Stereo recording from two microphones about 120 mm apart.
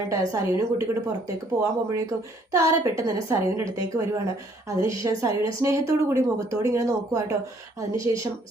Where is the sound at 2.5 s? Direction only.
25° right (ahead or behind).